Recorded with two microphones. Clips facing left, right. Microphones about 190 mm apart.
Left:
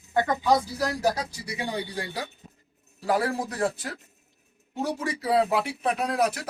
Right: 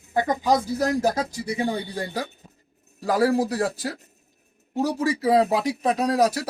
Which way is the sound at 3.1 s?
35° right (ahead or behind).